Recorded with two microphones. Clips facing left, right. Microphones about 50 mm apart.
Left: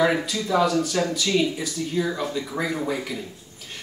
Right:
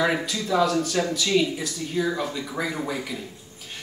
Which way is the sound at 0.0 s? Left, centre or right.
Centre.